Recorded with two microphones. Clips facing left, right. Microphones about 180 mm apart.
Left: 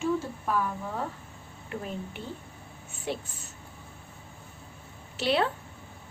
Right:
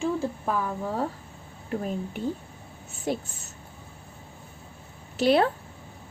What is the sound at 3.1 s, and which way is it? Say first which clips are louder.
Speech: right 5 dB; 40° right (ahead or behind).